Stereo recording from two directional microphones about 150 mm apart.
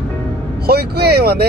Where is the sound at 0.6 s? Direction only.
90° right.